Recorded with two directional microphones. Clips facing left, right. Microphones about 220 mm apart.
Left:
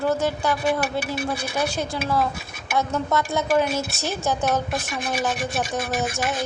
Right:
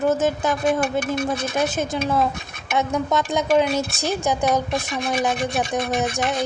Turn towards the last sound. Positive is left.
turn(degrees=0)  # may be behind; listen again after turning